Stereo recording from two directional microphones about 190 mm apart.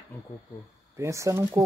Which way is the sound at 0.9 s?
15° right (ahead or behind).